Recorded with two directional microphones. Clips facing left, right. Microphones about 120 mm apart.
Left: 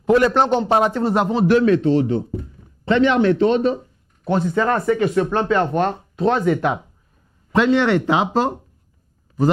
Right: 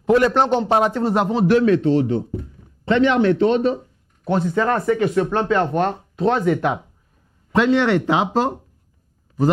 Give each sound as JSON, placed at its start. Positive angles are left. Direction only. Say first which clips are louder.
{"t": 0.0, "sound": "a man's voice", "louder": "even", "side_deg": 15}